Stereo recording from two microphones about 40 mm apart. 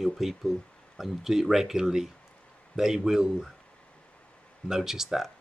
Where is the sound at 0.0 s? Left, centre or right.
Centre.